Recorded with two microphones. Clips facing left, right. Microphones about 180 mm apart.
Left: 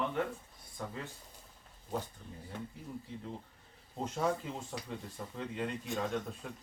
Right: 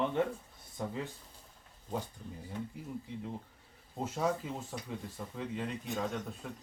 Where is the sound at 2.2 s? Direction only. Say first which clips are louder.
Right 4 dB; 15° right (ahead or behind).